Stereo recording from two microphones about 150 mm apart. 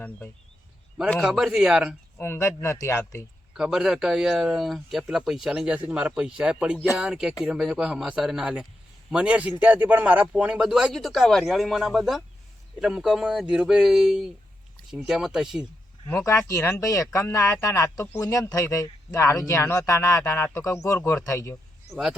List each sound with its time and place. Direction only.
1.1 s speech: centre (ahead or behind)
2.1 s speech: 15° left (ahead or behind)
3.6 s speech: 5° right (ahead or behind)
16.0 s speech: 15° left (ahead or behind)